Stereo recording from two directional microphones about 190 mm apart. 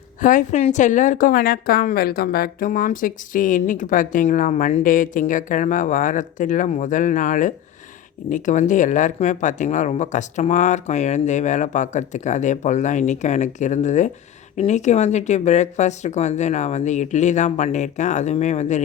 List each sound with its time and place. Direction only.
0.2 s a woman's voice: 45° left (ahead or behind)